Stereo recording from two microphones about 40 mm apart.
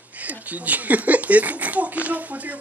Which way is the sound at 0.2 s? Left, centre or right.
Right.